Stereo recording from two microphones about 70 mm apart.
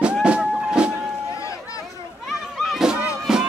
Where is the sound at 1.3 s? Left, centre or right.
Left.